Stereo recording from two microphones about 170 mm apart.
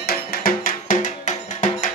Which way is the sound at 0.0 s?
60° left (ahead or behind).